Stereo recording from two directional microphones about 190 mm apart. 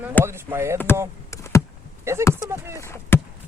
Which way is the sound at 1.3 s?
15° left (ahead or behind).